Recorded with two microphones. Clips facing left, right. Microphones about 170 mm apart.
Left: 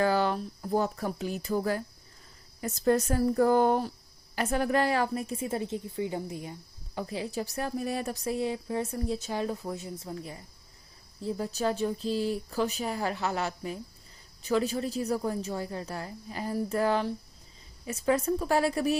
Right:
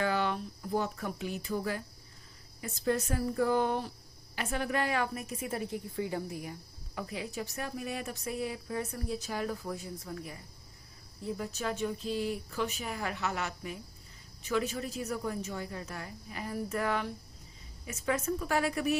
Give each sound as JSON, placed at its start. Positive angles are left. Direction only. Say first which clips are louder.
{"t": 0.0, "sound": "a woman's voice", "louder": "left 5 dB", "side_deg": 35}